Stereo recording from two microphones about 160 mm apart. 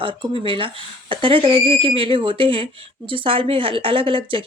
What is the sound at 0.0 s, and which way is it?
Speech, 30° right (ahead or behind).